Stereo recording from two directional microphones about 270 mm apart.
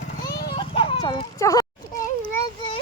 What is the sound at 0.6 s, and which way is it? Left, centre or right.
Children playing, centre.